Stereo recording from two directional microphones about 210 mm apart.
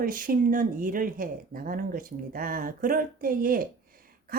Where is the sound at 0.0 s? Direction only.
40° right (ahead or behind).